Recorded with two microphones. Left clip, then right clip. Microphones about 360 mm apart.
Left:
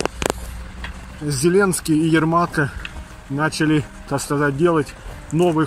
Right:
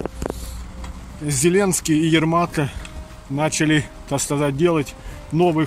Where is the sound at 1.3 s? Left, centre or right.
Centre.